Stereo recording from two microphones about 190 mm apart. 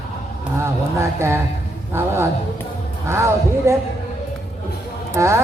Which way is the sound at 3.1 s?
15° right (ahead or behind).